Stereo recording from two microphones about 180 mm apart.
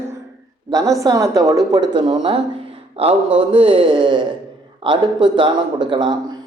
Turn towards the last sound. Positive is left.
turn(degrees=-25)  # may be behind; listen again after turning